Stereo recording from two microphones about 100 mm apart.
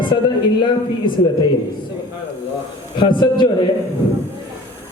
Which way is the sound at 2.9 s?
50° left (ahead or behind).